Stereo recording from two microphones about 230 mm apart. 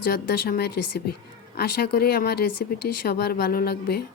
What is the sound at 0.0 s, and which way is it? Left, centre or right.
A woman's voice, left.